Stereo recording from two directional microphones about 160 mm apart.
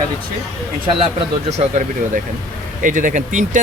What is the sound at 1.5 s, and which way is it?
Speech, 45° right (ahead or behind).